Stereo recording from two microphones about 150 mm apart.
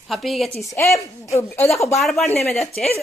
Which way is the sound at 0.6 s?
20° left (ahead or behind).